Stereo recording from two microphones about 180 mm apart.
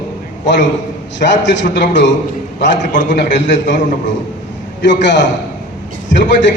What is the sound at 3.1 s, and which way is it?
Speech, 75° left (ahead or behind).